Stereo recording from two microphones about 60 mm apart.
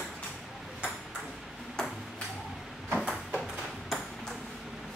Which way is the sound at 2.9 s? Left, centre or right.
Centre.